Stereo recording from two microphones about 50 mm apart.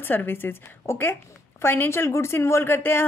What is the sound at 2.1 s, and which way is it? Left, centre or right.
Speech, left.